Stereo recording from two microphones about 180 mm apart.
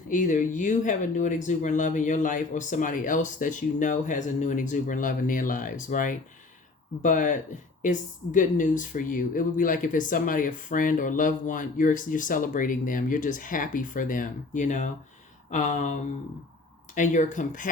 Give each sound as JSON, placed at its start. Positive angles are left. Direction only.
{"t": 0.1, "sound": "speech", "side_deg": 45}